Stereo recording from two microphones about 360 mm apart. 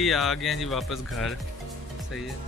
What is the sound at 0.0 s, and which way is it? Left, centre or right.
Speech, centre.